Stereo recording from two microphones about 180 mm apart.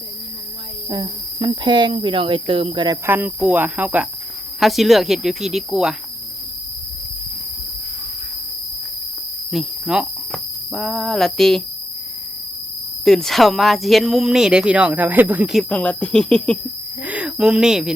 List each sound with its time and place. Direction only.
0.9 s speech: 20° right (ahead or behind)
3.1 s cricket: 10° right (ahead or behind)
4.6 s speech: centre (ahead or behind)
9.5 s speech: 5° right (ahead or behind)
13.1 s speech: centre (ahead or behind)
15.7 s speech: 5° left (ahead or behind)
17.0 s speech: 5° right (ahead or behind)